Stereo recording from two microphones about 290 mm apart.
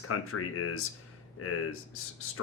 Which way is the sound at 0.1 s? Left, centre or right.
Left.